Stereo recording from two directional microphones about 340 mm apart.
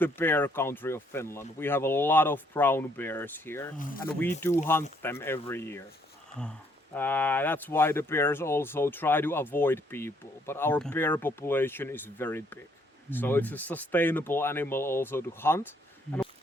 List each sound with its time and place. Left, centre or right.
0.0 s speech: centre
3.8 s speech: left
4.0 s speech: centre
6.9 s speech: centre